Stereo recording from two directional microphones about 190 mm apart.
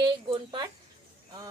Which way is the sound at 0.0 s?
25° right (ahead or behind).